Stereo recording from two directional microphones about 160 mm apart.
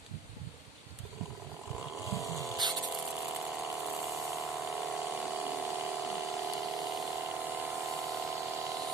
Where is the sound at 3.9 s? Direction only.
Centre (ahead or behind).